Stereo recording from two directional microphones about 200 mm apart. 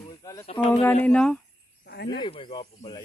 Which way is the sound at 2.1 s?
25° left (ahead or behind).